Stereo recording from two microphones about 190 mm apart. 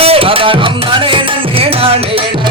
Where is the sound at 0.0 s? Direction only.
30° right (ahead or behind).